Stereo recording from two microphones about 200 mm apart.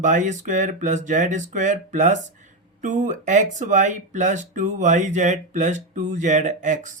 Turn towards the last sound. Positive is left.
turn(degrees=-40)  # may be behind; listen again after turning